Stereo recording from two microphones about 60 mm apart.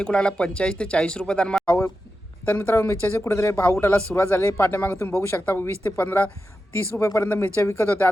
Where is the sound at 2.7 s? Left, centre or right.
Left.